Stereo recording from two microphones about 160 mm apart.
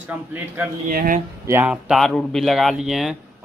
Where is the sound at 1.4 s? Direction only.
10° right (ahead or behind).